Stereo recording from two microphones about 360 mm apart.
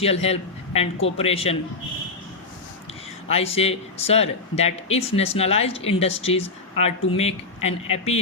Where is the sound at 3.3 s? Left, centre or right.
Centre.